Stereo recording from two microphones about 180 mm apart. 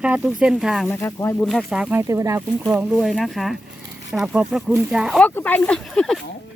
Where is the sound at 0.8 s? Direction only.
15° left (ahead or behind).